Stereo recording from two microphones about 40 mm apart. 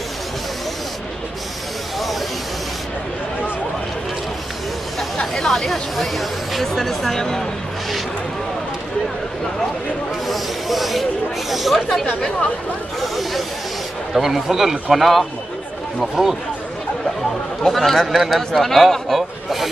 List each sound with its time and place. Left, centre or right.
5.1 s speech: centre
10.2 s speech: centre
13.0 s speech: centre
16.2 s speech: centre
17.6 s a man's voice: centre